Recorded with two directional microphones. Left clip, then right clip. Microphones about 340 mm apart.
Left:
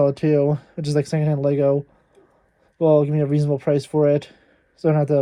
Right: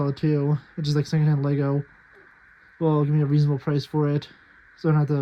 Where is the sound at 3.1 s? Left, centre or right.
Centre.